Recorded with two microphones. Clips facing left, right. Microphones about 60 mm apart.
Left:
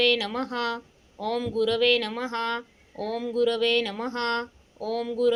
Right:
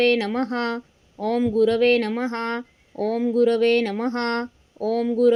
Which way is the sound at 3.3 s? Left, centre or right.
Right.